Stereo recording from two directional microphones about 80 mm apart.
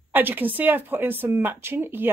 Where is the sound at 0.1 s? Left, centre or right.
Right.